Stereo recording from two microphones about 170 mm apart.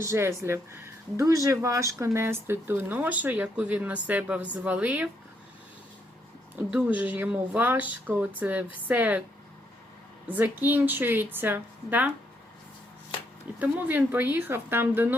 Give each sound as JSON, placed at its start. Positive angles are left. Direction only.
{"t": 0.0, "sound": "speech", "side_deg": -15}
{"t": 6.7, "sound": "speech", "side_deg": -10}
{"t": 10.2, "sound": "speech", "side_deg": -10}
{"t": 13.6, "sound": "speech", "side_deg": -10}